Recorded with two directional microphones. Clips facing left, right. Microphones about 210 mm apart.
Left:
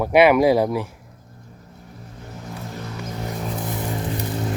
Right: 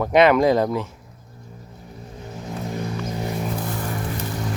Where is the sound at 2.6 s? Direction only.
15° right (ahead or behind).